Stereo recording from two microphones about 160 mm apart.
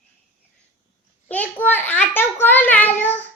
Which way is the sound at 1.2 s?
10° left (ahead or behind).